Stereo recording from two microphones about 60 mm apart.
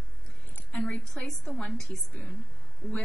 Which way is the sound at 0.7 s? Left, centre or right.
Left.